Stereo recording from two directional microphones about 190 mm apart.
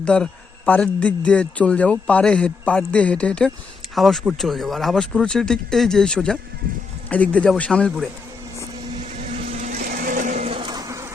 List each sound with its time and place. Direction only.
0.0 s a man's voice: 5° left (ahead or behind)
9.1 s vehicle: 40° right (ahead or behind); by 11.1 s 15° right (ahead or behind)